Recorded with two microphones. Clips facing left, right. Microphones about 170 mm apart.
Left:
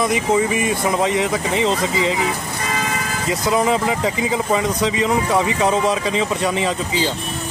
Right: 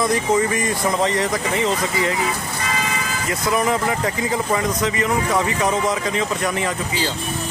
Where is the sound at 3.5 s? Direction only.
20° left (ahead or behind).